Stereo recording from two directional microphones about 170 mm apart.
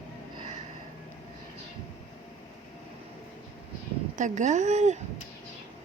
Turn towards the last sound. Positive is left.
turn(degrees=-45)  # may be behind; listen again after turning